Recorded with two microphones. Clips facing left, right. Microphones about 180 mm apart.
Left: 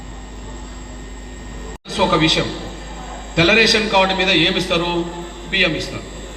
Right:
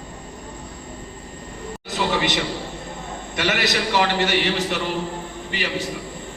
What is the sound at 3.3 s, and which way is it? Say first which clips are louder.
A man's voice: left 8 dB; 85° left.